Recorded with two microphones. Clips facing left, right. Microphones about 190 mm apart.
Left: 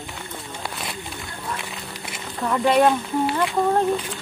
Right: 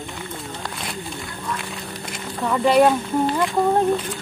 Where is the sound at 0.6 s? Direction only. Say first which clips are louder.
Even; centre (ahead or behind).